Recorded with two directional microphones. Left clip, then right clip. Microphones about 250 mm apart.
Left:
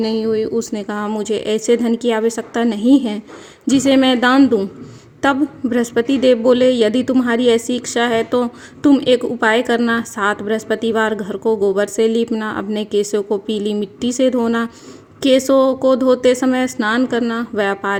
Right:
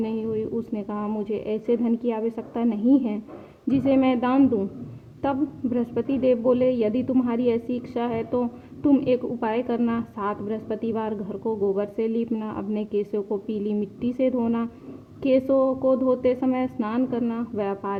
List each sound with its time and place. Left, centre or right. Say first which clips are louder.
0.0 s a woman's voice: left 10 dB; left
9.4 s a woman's voice: left 10 dB; left